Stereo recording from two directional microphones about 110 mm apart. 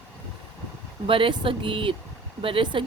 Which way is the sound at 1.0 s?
50° right (ahead or behind).